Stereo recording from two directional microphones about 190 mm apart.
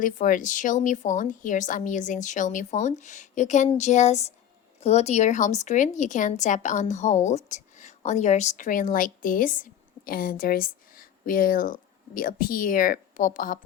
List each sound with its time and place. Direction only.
0.0 s a woman's voice: 45° left (ahead or behind)